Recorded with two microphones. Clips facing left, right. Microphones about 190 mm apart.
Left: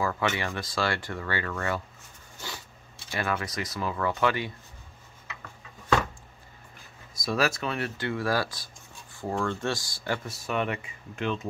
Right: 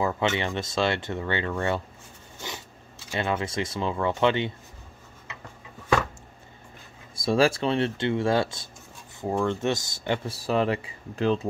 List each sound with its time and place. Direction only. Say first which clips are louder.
0.0 s speech: right 3 dB; 25° right (ahead or behind)
3.1 s speech: right 3 dB; 25° right (ahead or behind)
7.2 s speech: right 6 dB; 30° right (ahead or behind)